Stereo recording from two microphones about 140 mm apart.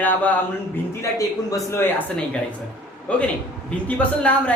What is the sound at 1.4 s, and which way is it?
Speech, 20° left (ahead or behind).